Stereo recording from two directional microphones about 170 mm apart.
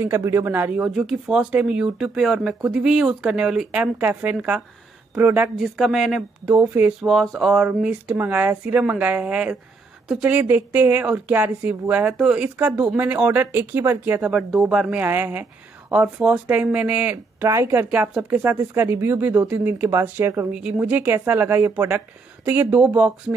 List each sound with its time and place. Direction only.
0.0 s speech: 15° right (ahead or behind)
0.8 s speech: centre (ahead or behind)
7.1 s speech: centre (ahead or behind)